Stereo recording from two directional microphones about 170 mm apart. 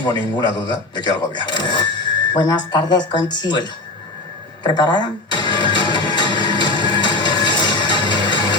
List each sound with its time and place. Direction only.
0.0 s speech: 25° left (ahead or behind)
4.6 s music: 25° left (ahead or behind)